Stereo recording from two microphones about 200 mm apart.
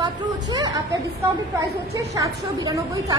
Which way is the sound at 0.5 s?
20° right (ahead or behind).